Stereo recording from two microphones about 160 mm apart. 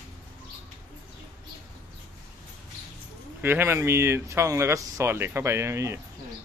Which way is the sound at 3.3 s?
15° right (ahead or behind).